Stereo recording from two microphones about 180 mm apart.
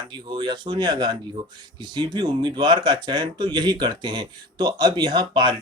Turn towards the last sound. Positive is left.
turn(degrees=-25)  # may be behind; listen again after turning